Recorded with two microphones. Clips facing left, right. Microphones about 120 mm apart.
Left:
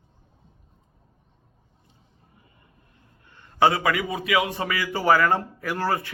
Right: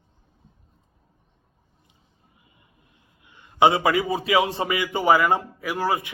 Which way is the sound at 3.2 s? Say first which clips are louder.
Right 2 dB; 15° right (ahead or behind).